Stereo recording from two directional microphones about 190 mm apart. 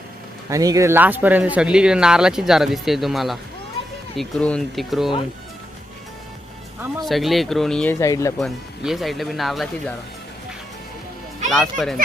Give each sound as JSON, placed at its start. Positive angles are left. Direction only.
{"t": 0.5, "sound": "speech", "side_deg": -15}
{"t": 7.0, "sound": "speech", "side_deg": 0}
{"t": 7.9, "sound": "speech", "side_deg": 15}
{"t": 8.4, "sound": "speech", "side_deg": 0}
{"t": 11.4, "sound": "speech", "side_deg": 0}